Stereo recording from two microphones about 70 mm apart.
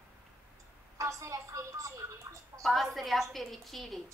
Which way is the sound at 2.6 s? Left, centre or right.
Centre.